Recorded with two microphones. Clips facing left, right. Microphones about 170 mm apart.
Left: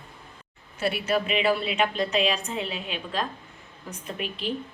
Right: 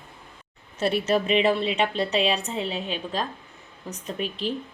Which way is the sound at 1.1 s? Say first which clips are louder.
Right 2 dB; 30° right (ahead or behind).